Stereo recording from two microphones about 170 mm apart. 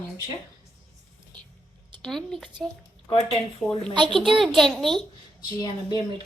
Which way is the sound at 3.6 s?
Centre (ahead or behind).